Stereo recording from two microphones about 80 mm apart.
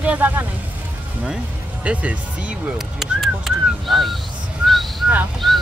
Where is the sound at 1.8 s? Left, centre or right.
Centre.